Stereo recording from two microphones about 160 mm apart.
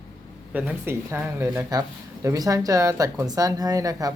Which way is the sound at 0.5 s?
10° right (ahead or behind).